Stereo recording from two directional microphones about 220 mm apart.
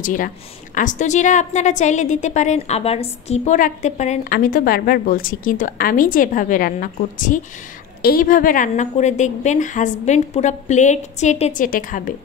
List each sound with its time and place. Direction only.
0.0 s a woman's voice: 35° left (ahead or behind)